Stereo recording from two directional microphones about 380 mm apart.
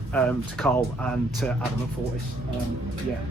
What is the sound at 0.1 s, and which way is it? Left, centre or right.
Speech, centre.